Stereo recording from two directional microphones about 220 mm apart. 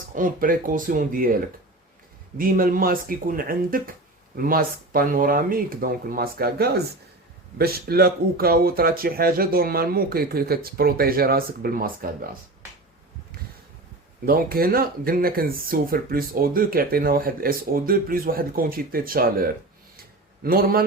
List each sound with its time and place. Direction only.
0.1 s speech: 40° right (ahead or behind)
2.4 s speech: 40° right (ahead or behind)
14.3 s speech: 40° right (ahead or behind)